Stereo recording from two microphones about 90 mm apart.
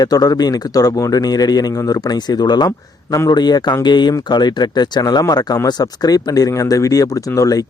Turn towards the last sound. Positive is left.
turn(degrees=40)  # may be behind; listen again after turning